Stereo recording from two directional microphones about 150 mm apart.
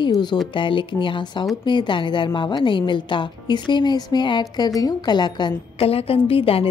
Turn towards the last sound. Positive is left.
turn(degrees=40)  # may be behind; listen again after turning